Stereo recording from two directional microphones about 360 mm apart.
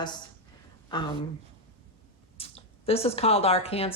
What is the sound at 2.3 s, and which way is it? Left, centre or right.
Speech, centre.